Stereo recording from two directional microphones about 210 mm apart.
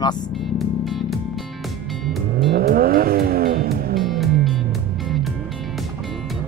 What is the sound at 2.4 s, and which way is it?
Vehicle, 45° right (ahead or behind).